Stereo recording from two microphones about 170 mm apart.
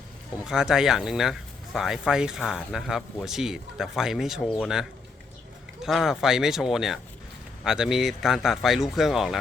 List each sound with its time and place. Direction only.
0.4 s speech: 5° right (ahead or behind)